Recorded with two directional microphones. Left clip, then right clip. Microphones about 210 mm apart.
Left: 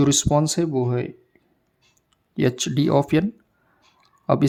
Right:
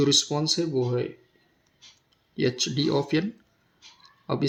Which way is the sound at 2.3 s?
40° left (ahead or behind).